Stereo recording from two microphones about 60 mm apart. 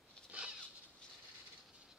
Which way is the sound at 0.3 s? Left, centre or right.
Centre.